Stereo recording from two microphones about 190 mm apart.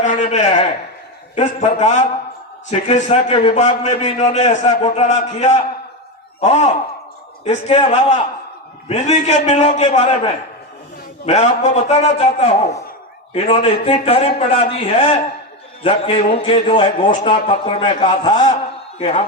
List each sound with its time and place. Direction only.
0.0 s a man's voice: 40° left (ahead or behind)
11.3 s a man's voice: 35° left (ahead or behind)